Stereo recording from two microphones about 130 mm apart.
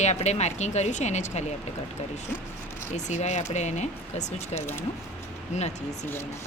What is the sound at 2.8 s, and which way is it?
Speech, 65° left (ahead or behind).